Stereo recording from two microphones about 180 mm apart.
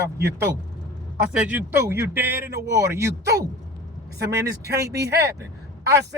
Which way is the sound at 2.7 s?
15° right (ahead or behind).